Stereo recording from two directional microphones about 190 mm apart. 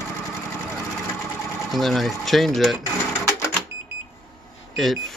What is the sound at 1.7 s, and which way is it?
Speech, centre (ahead or behind).